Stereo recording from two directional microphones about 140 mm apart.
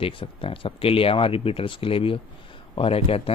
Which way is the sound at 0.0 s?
40° left (ahead or behind).